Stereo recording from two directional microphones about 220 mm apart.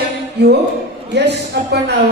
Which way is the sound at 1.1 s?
50° right (ahead or behind).